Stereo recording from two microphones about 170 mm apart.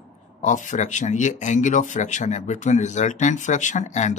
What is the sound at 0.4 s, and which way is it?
A man's voice, 45° left (ahead or behind).